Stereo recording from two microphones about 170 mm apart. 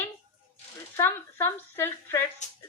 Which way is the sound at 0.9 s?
15° left (ahead or behind).